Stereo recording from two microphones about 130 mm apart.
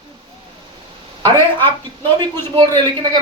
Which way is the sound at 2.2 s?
35° right (ahead or behind).